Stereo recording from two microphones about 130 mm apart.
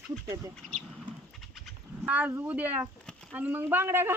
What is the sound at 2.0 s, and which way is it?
Speech, 10° right (ahead or behind).